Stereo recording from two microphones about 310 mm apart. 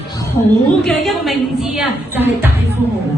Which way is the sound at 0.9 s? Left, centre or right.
Centre.